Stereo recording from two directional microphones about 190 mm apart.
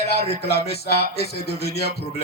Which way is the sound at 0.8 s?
60° left (ahead or behind).